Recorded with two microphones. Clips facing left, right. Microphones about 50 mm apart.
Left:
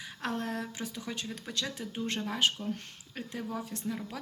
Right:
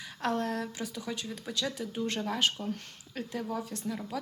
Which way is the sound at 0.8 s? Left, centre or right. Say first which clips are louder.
Right 1 dB; left.